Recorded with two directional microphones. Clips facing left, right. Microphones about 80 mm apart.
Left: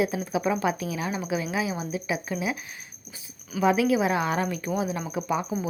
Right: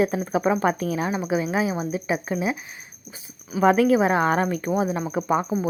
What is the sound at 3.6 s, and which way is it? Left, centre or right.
A woman's voice, right.